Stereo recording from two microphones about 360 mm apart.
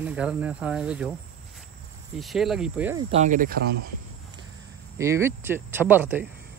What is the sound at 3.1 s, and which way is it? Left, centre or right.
Cricket, centre.